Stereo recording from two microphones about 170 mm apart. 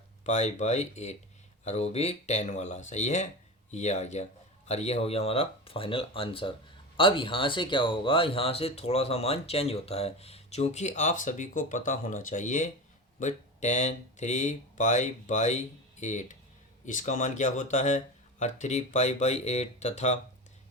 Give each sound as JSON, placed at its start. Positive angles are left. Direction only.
{"t": 0.3, "sound": "speech", "side_deg": 45}